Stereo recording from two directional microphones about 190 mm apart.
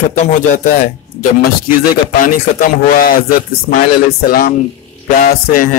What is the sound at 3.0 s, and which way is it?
Speech, 50° left (ahead or behind).